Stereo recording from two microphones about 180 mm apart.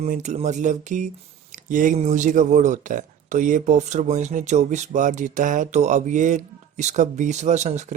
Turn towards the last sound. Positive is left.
turn(degrees=-40)  # may be behind; listen again after turning